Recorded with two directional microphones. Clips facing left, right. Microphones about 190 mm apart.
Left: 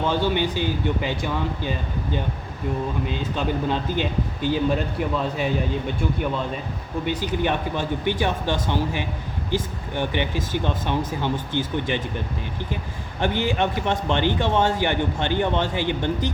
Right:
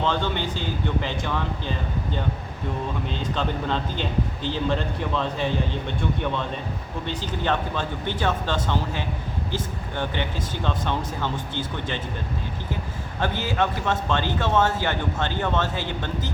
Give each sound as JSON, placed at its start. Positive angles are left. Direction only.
{"t": 0.0, "sound": "a man's voice", "side_deg": 10}
{"t": 3.1, "sound": "a man's voice", "side_deg": 10}
{"t": 7.0, "sound": "a man's voice", "side_deg": 10}
{"t": 13.1, "sound": "a man's voice", "side_deg": 20}